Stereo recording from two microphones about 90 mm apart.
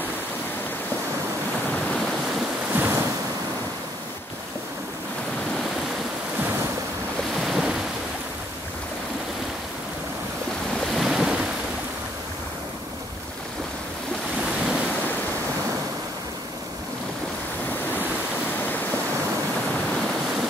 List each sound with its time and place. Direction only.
2.7 s waves: 20° right (ahead or behind)
6.4 s waves: 25° right (ahead or behind)
7.3 s waves: 5° right (ahead or behind)
10.9 s waves: 5° right (ahead or behind)